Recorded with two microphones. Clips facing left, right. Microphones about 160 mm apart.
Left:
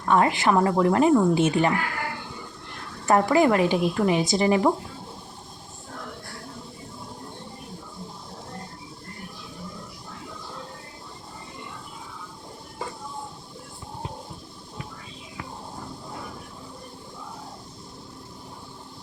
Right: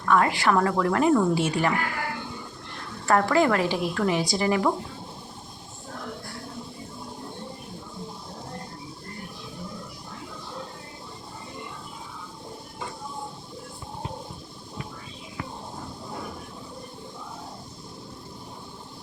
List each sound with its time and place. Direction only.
0.0 s speech: 25° left (ahead or behind)
3.1 s speech: 15° left (ahead or behind)